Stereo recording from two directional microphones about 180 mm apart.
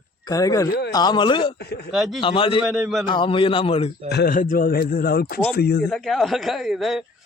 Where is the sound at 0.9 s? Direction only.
25° left (ahead or behind).